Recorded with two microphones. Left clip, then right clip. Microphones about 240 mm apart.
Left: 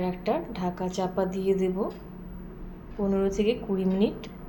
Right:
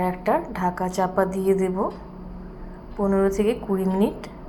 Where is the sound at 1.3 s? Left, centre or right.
Right.